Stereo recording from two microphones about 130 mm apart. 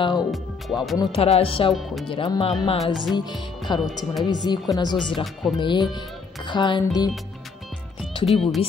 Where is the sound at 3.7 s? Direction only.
35° left (ahead or behind).